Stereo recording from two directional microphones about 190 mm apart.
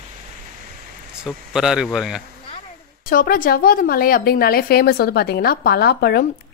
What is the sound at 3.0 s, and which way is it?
A woman's voice, 45° left (ahead or behind).